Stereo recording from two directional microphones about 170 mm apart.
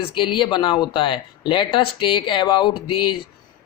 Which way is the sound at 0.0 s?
30° left (ahead or behind).